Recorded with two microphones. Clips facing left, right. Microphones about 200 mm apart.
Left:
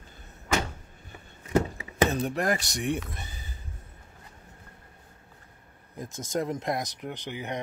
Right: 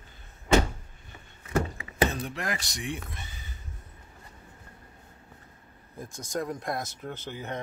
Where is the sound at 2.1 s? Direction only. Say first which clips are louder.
Left 6 dB; 45° left (ahead or behind).